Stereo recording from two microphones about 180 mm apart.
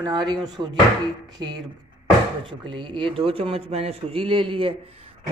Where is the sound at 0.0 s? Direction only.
25° right (ahead or behind).